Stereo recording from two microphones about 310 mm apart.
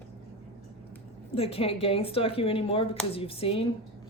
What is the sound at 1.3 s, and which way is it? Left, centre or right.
A woman's voice, centre.